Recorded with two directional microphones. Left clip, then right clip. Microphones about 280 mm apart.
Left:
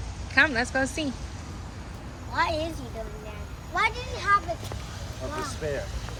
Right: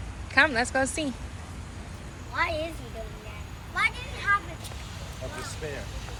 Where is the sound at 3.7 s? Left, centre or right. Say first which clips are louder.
Left 1 dB; left.